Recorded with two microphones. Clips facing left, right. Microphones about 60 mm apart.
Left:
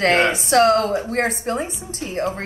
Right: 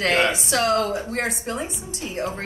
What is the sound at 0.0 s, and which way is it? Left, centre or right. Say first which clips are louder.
Speech: left 3 dB; left.